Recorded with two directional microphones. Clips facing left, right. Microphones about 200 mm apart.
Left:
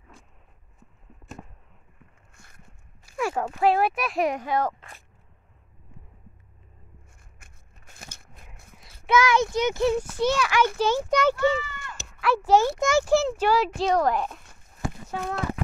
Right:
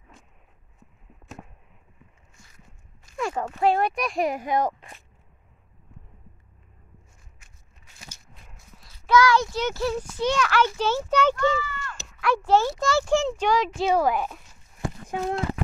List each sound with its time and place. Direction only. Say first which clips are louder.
2.3 s a sound: even; 55° left (ahead or behind)
3.1 s speech: left 1 dB; 10° left (ahead or behind)
4.4 s speech: right 1 dB; 15° right (ahead or behind)
7.3 s a sound: left 3 dB; 55° left (ahead or behind)
9.0 s a child's voice: right 1 dB; 20° left (ahead or behind)
13.1 s a child's voice: left 1 dB; 5° left (ahead or behind)
13.8 s a child's voice: right 2 dB; 5° right (ahead or behind)